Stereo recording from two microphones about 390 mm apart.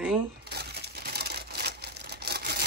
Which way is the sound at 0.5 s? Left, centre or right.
Right.